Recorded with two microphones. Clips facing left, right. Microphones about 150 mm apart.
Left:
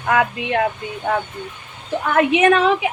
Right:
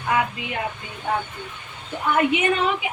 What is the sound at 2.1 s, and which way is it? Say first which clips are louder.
Speech: left 6 dB; 90° left.